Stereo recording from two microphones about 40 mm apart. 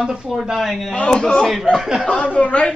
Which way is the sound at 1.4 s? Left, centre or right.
Centre.